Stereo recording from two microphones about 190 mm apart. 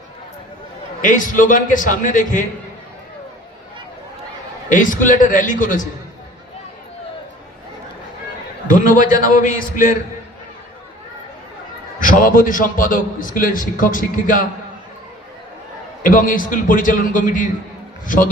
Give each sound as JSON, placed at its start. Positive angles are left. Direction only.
{"t": 1.0, "sound": "a man's voice", "side_deg": 45}
{"t": 4.7, "sound": "a man's voice", "side_deg": 45}
{"t": 8.7, "sound": "a man's voice", "side_deg": 45}
{"t": 11.9, "sound": "a man's voice", "side_deg": 45}
{"t": 16.0, "sound": "a man's voice", "side_deg": 45}